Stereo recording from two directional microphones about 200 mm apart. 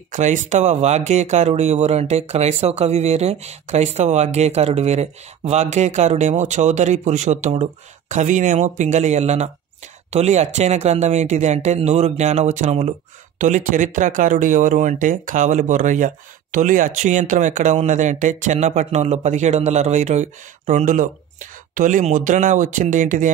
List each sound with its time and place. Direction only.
0.1 s speech: 40° right (ahead or behind)